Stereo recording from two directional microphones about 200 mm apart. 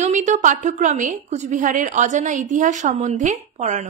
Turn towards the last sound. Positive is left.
turn(degrees=-35)  # may be behind; listen again after turning